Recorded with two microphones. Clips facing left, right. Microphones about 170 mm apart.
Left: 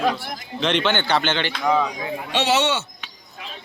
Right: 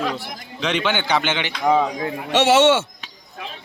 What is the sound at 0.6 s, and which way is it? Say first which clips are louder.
A man's voice: left 1 dB; 5° right (ahead or behind).